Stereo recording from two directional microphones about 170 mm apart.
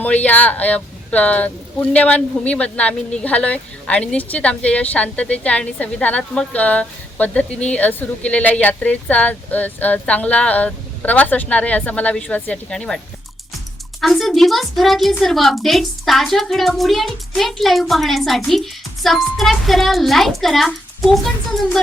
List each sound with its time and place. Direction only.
0.0 s speech: 10° left (ahead or behind)
14.0 s a woman's voice: centre (ahead or behind)